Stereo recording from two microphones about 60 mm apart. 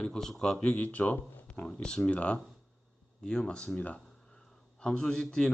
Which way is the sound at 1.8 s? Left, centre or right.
Centre.